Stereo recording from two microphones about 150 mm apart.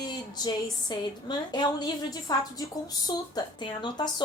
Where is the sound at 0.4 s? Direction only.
30° left (ahead or behind).